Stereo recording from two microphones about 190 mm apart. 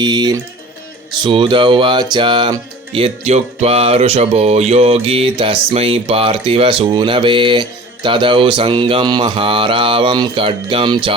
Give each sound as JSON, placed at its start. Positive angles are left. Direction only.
{"t": 0.0, "sound": "music", "side_deg": -20}